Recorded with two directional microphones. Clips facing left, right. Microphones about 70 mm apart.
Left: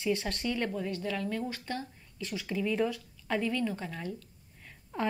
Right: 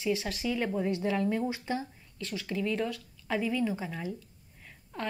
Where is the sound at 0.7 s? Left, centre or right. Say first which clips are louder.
Right 4 dB; right.